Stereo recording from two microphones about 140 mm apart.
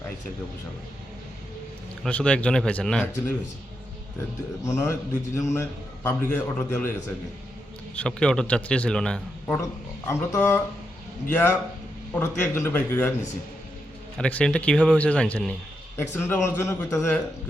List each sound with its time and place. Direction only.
2.0 s a man's voice: 10° left (ahead or behind)
4.6 s a man's voice: 20° left (ahead or behind)
7.9 s a man's voice: 5° left (ahead or behind)
10.1 s a man's voice: 20° left (ahead or behind)
14.2 s a man's voice: 10° left (ahead or behind)